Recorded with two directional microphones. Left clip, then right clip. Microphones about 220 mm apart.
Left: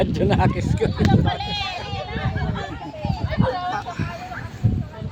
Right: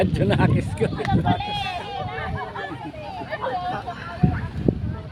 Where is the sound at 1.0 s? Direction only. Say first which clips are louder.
Even; 35° left (ahead or behind).